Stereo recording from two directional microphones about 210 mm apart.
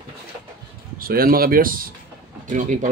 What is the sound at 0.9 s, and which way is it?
Speech, 45° right (ahead or behind).